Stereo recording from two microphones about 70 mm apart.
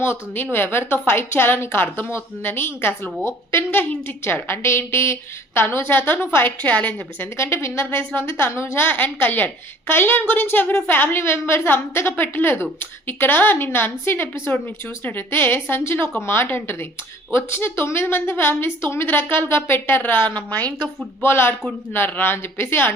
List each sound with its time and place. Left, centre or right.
0.0 s a woman's voice: left
7.3 s a woman's voice: left
21.2 s a woman's voice: left